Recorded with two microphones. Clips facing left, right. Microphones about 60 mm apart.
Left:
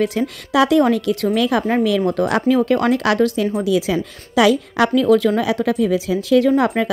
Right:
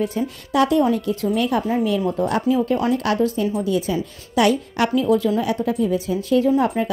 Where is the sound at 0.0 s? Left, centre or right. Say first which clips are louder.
Left 4 dB; left.